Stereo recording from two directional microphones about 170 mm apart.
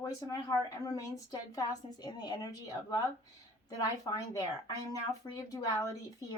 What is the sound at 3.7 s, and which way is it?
Speech, 20° left (ahead or behind).